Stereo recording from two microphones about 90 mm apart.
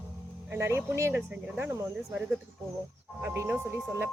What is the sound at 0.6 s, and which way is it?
Speech, 30° right (ahead or behind).